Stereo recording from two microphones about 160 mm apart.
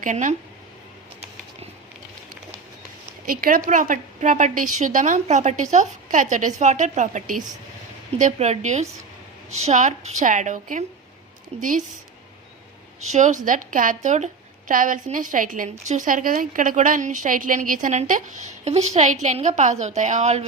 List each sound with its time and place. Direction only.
0.0 s a woman's voice: 50° right (ahead or behind)
3.2 s a woman's voice: 60° right (ahead or behind)
11.5 s speech: 40° right (ahead or behind)
13.1 s a woman's voice: 50° right (ahead or behind)